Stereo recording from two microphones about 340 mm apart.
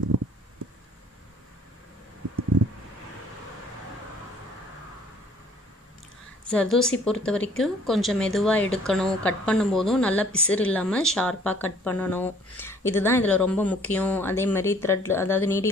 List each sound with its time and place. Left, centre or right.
6.5 s speech: centre